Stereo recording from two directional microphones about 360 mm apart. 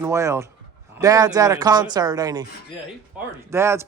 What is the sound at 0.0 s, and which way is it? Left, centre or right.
Speech, centre.